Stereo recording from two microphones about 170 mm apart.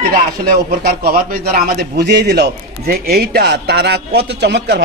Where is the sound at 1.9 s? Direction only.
80° right.